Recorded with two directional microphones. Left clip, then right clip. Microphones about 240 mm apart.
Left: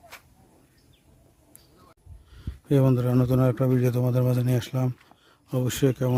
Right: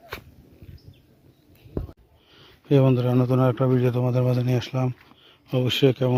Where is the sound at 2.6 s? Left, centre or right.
Centre.